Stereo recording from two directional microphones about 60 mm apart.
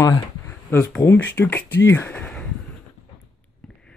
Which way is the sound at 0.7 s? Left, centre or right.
Left.